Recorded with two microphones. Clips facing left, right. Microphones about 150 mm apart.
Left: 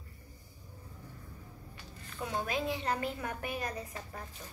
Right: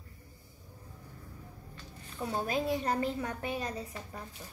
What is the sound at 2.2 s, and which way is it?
A woman's voice, 35° right (ahead or behind).